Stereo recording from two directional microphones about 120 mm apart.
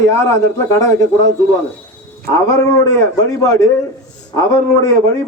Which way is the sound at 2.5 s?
20° left (ahead or behind).